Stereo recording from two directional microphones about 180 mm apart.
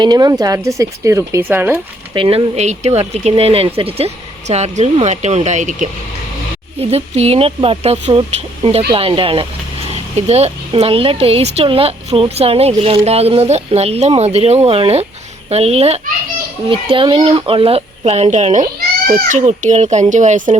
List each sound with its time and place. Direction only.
0.0 s speech: 20° right (ahead or behind)
2.1 s speech: 30° right (ahead or behind)
6.9 s speech: 35° right (ahead or behind)